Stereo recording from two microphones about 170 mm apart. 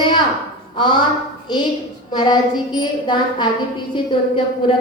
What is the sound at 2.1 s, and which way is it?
A woman's voice, 25° left (ahead or behind).